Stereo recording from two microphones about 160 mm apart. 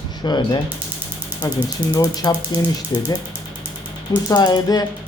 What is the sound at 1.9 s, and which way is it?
Speech, 25° left (ahead or behind).